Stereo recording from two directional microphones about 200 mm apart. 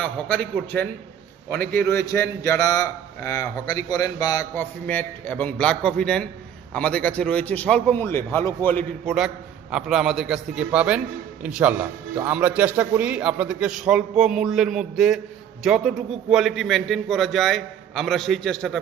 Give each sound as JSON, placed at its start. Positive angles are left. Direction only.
{"t": 0.0, "sound": "a man's voice", "side_deg": 10}
{"t": 1.5, "sound": "a man's voice", "side_deg": -50}
{"t": 2.4, "sound": "a man's voice", "side_deg": 15}
{"t": 9.7, "sound": "a man's voice", "side_deg": 0}